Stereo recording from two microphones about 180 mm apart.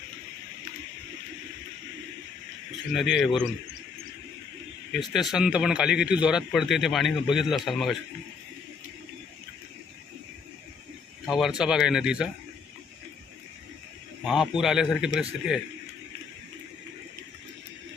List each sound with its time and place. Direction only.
2.9 s a man's voice: centre (ahead or behind)
4.9 s a man's voice: centre (ahead or behind)
11.3 s a man's voice: centre (ahead or behind)
14.3 s a man's voice: centre (ahead or behind)